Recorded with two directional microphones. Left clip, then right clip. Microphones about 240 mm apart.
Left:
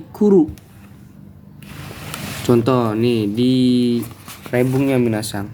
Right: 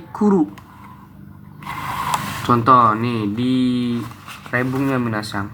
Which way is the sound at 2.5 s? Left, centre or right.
Left.